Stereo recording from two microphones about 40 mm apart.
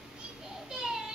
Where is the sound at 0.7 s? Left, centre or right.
Centre.